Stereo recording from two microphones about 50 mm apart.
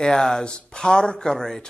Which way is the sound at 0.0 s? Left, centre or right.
Centre.